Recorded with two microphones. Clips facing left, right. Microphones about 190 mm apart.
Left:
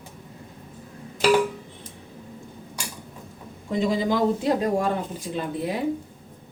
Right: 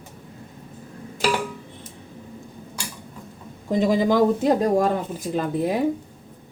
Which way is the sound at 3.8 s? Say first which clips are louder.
Right 4 dB; 45° right (ahead or behind).